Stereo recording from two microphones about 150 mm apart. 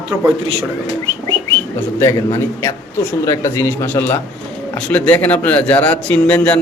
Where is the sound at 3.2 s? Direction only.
20° left (ahead or behind).